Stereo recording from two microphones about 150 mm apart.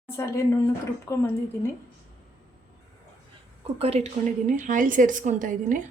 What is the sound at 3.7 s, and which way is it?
A woman's voice, 40° right (ahead or behind).